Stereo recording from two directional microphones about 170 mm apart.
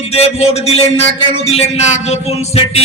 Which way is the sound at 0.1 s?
35° left (ahead or behind).